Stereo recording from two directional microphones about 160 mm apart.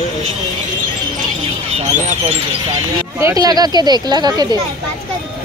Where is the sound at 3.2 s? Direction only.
20° right (ahead or behind).